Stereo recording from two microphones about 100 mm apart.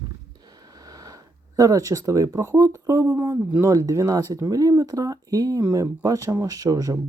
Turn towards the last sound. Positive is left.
turn(degrees=-35)  # may be behind; listen again after turning